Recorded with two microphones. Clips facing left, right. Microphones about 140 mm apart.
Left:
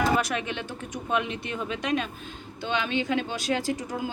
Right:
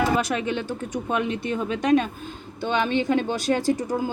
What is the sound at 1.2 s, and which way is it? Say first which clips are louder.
A woman's voice: right 6 dB; 40° right (ahead or behind).